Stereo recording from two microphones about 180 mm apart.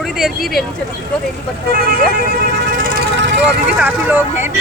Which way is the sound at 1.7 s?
55° right (ahead or behind).